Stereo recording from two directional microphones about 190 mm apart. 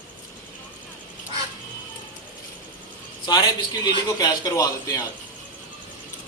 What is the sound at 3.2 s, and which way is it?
A man's voice, 20° left (ahead or behind).